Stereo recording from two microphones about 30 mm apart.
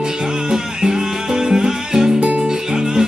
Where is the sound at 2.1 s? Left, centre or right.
Right.